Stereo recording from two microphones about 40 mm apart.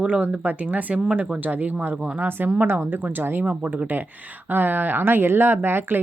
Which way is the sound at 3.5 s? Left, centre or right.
Right.